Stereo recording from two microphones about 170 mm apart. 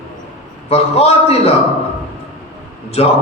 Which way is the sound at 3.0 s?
35° left (ahead or behind).